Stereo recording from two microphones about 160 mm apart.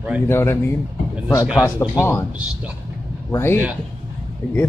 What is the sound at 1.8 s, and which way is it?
Speech, 25° left (ahead or behind).